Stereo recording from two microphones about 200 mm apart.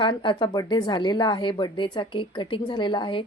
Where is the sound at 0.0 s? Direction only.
25° left (ahead or behind).